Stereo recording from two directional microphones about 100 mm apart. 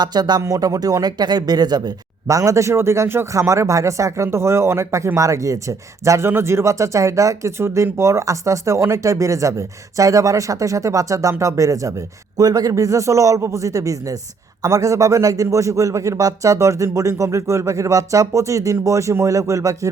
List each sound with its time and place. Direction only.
0.0 s speech: 45° right (ahead or behind)